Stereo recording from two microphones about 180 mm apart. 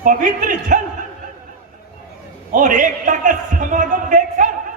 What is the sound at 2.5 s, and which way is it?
A man's voice, 45° right (ahead or behind).